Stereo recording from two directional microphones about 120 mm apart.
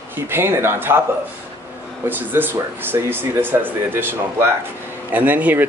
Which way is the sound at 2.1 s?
15° right (ahead or behind).